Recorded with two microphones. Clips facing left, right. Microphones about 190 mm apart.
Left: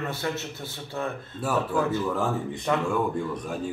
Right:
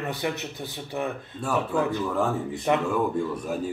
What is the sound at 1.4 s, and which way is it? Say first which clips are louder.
Speech: even; 5° left (ahead or behind).